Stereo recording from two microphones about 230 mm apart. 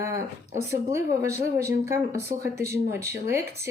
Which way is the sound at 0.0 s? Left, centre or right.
Centre.